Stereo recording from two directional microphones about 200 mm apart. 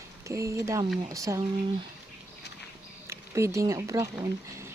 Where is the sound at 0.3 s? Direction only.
15° right (ahead or behind).